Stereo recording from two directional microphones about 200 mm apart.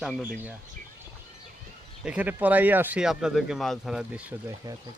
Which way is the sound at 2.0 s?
5° right (ahead or behind).